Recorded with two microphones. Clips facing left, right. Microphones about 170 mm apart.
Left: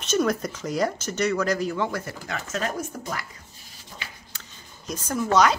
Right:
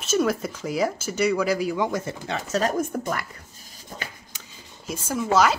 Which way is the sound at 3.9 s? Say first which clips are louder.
Right 5 dB; 50° right (ahead or behind).